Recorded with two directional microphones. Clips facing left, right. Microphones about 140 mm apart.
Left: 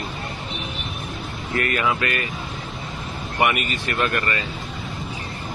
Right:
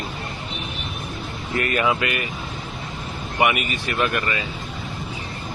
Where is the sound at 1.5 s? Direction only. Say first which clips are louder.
Right 1 dB; 20° right (ahead or behind).